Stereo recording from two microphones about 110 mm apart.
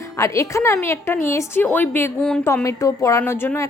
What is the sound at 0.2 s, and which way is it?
A woman's voice, 30° left (ahead or behind).